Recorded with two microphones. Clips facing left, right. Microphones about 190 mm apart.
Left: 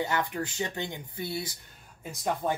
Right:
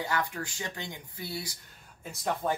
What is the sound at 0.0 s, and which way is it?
Speech, 20° left (ahead or behind).